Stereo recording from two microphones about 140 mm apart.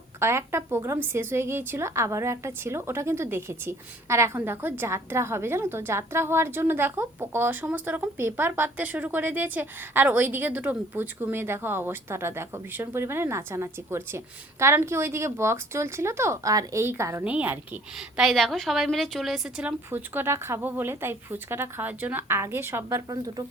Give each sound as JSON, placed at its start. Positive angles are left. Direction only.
{"t": 0.2, "sound": "a woman's voice", "side_deg": -15}